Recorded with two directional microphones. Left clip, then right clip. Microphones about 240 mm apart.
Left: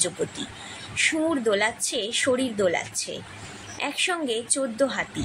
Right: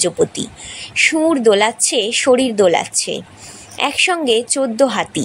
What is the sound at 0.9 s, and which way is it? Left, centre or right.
A woman's voice, right.